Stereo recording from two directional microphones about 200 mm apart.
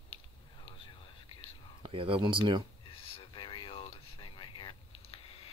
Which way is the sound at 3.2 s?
25° left (ahead or behind).